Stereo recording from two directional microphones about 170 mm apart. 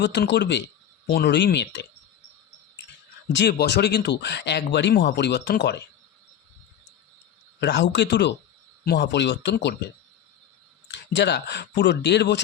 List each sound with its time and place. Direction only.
0.0 s speech: 90° left
1.0 s speech: 80° left
3.3 s speech: 80° left
7.6 s speech: 80° left
11.1 s speech: 85° left